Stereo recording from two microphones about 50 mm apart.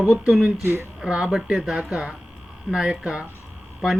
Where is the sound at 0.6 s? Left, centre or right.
Right.